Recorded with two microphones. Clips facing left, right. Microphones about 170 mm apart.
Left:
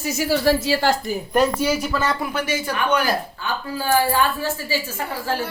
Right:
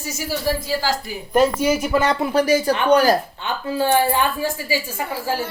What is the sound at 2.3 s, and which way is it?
Speech, 35° right (ahead or behind).